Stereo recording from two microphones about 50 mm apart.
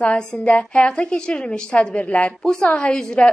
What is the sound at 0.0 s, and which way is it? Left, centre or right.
A woman's voice, left.